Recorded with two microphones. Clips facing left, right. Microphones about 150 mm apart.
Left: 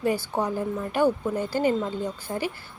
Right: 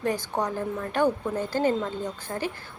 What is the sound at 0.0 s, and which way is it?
A woman's voice, 10° left (ahead or behind).